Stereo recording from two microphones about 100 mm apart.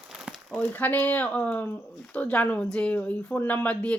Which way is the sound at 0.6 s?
15° left (ahead or behind).